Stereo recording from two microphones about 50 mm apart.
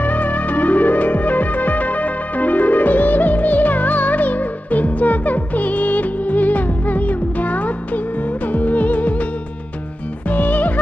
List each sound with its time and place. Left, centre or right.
0.0 s music: left
10.3 s music: left